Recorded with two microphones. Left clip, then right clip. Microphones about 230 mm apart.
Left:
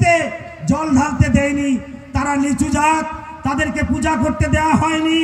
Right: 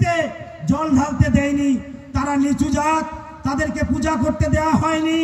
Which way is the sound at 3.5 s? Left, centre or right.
Right.